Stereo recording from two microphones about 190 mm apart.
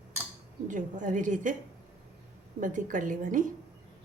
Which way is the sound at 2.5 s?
45° right (ahead or behind).